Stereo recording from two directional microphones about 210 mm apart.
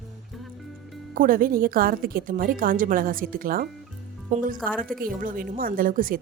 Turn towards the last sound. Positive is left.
turn(degrees=-40)  # may be behind; listen again after turning